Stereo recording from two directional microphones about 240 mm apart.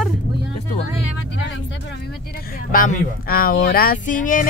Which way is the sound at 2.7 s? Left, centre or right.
Left.